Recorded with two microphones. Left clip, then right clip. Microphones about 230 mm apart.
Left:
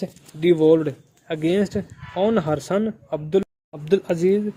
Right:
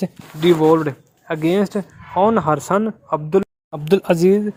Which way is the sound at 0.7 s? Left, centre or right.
Centre.